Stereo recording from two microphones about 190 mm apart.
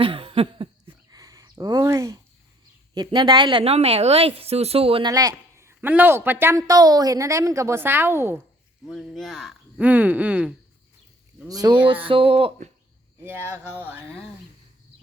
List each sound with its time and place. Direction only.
0.0 s a sound: 30° right (ahead or behind)
1.1 s a sound: 15° right (ahead or behind)
2.9 s a woman's voice: 20° right (ahead or behind)
8.9 s speech: centre (ahead or behind)
11.4 s a woman's voice: 20° right (ahead or behind)
13.2 s speech: 15° right (ahead or behind)